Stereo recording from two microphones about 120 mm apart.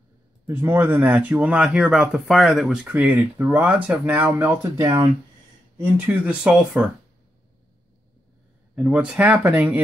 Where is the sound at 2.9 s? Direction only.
15° right (ahead or behind).